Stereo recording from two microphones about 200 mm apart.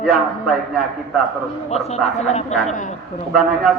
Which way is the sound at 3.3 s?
Centre (ahead or behind).